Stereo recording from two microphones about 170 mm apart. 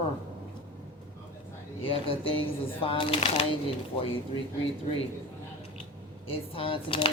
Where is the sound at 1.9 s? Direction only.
30° left (ahead or behind).